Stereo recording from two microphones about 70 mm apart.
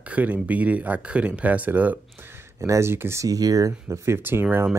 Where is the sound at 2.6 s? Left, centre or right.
Right.